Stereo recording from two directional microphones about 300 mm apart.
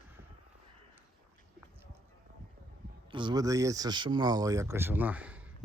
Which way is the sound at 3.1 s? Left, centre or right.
Centre.